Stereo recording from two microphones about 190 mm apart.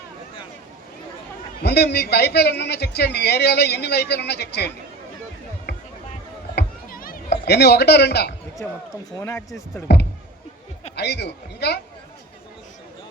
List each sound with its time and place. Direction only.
1.6 s a man's voice: 55° left (ahead or behind)
6.6 s a sound: 50° left (ahead or behind)
8.6 s speech: 10° left (ahead or behind)
9.9 s a man's voice: 60° left (ahead or behind)